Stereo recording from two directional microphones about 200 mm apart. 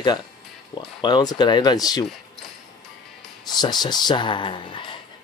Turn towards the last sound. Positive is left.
turn(degrees=25)  # may be behind; listen again after turning